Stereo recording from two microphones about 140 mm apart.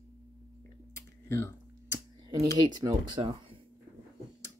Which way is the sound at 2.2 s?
30° right (ahead or behind).